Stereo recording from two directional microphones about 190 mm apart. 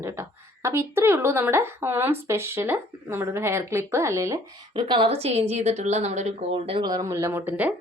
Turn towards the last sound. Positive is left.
turn(degrees=-10)  # may be behind; listen again after turning